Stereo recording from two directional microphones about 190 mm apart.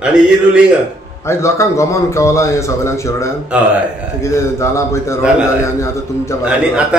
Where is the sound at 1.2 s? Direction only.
15° left (ahead or behind).